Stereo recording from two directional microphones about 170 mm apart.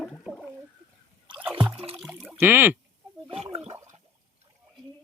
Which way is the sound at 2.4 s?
10° right (ahead or behind).